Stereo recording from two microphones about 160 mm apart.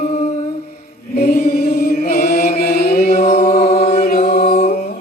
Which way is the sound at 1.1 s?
80° left.